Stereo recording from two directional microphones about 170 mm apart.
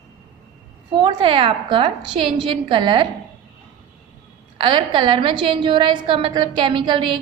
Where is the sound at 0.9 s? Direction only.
30° right (ahead or behind).